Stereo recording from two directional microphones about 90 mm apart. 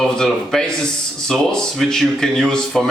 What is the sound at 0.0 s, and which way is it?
A man's voice, 5° left (ahead or behind).